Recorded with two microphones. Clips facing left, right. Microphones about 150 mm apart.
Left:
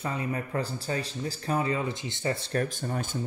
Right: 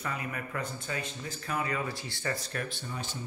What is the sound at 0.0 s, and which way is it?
Speech, 30° left (ahead or behind).